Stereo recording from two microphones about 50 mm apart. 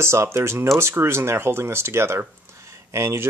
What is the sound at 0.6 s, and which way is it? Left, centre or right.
Speech, right.